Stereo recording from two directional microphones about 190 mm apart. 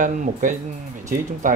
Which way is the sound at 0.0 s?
45° right (ahead or behind).